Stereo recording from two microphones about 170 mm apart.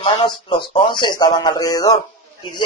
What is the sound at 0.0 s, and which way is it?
A child's voice, 30° left (ahead or behind).